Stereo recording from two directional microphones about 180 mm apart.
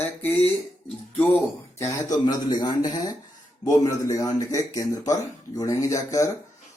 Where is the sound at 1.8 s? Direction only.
20° left (ahead or behind).